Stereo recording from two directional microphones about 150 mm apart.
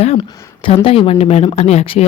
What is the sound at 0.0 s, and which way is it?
Speech, 40° left (ahead or behind).